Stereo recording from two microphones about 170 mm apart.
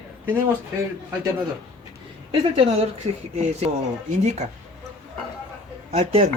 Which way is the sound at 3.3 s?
40° right (ahead or behind).